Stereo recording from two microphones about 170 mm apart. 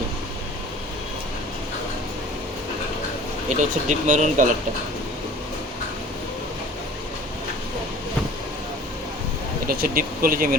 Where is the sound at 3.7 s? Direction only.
50° right (ahead or behind).